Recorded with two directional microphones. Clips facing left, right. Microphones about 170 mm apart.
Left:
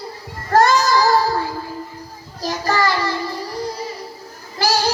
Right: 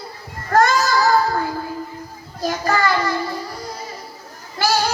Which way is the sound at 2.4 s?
35° left (ahead or behind).